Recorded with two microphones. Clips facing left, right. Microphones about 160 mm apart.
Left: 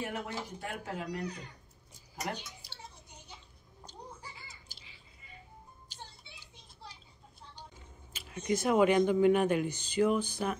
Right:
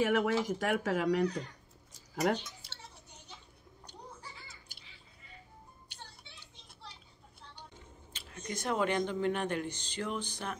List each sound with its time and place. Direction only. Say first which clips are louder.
0.0 s speech: right 9 dB; 90° right
8.1 s speech: left 9 dB; 10° left (ahead or behind)